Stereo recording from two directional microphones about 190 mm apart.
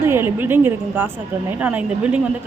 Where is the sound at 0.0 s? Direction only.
10° right (ahead or behind).